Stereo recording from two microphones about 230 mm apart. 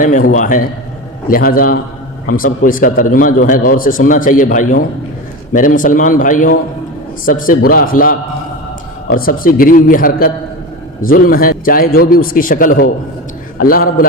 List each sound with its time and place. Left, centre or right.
0.3 s a man's voice: left